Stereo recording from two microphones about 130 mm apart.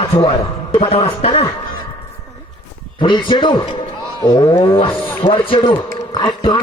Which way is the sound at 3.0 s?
40° left (ahead or behind).